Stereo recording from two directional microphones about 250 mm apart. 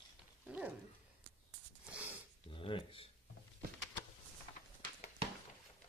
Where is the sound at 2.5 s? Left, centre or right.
Left.